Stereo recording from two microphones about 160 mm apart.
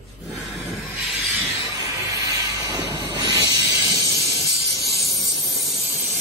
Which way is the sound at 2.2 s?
20° right (ahead or behind).